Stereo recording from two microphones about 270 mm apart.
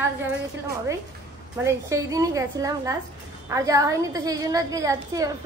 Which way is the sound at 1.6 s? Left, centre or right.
Centre.